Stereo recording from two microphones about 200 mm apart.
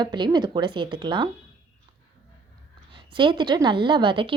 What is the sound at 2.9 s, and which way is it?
A woman's voice, 25° right (ahead or behind).